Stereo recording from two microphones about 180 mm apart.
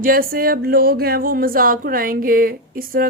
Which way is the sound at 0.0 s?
50° right (ahead or behind).